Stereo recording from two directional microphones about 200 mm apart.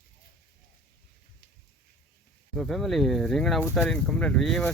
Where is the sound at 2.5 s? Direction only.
Centre (ahead or behind).